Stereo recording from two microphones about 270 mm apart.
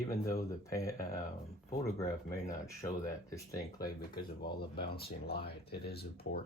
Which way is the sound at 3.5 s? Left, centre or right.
Left.